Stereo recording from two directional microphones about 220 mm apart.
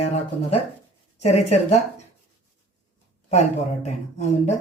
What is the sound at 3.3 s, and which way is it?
Speech, 30° left (ahead or behind).